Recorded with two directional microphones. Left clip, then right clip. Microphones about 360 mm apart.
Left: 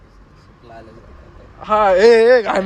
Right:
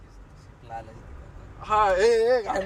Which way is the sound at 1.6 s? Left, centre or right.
Centre.